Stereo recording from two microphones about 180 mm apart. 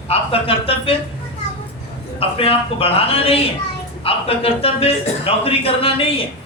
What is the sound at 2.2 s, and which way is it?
Speech, 30° left (ahead or behind).